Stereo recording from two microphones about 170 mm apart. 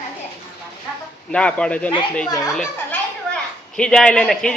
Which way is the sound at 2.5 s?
5° left (ahead or behind).